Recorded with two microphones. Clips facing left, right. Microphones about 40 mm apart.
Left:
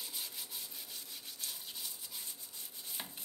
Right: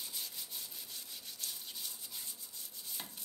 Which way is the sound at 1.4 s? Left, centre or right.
Centre.